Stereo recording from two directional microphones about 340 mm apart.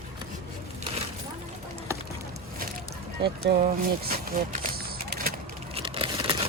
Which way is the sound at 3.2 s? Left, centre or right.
Right.